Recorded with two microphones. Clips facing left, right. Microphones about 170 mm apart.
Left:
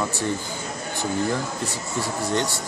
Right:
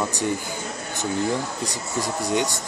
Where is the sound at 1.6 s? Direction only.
15° right (ahead or behind).